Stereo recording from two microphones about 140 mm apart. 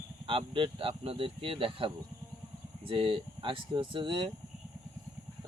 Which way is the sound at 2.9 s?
40° right (ahead or behind).